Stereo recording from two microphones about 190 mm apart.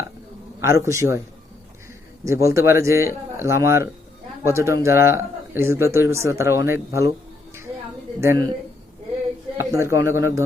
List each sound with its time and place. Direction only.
0.6 s speech: 15° right (ahead or behind)
2.2 s speech: 15° right (ahead or behind)
8.2 s speech: 15° right (ahead or behind)
9.6 s speech: 15° right (ahead or behind)